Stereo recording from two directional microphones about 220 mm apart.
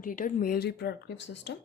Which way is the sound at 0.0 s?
35° left (ahead or behind).